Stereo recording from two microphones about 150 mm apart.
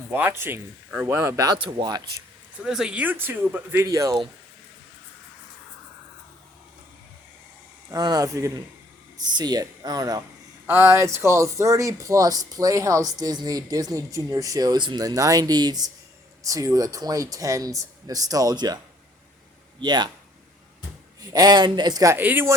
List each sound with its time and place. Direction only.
0.1 s speech: 15° right (ahead or behind)
2.6 s speech: 5° right (ahead or behind); by 4.2 s 20° right (ahead or behind)
7.9 s speech: 25° right (ahead or behind)
19.8 s speech: 30° right (ahead or behind)
21.2 s speech: 25° right (ahead or behind)